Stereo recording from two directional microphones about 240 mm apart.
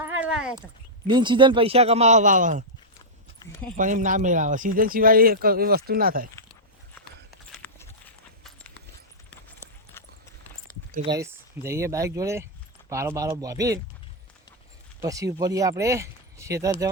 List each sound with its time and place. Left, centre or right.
0.0 s a sound: centre
1.0 s speech: centre
3.5 s speech: centre
3.8 s speech: right
7.5 s clip-clop: centre
11.2 s speech: centre
15.0 s speech: centre